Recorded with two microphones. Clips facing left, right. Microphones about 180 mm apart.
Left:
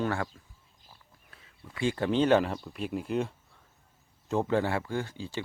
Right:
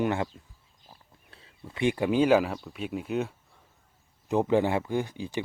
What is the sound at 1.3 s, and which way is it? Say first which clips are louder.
Speech: right 4 dB; 25° right (ahead or behind).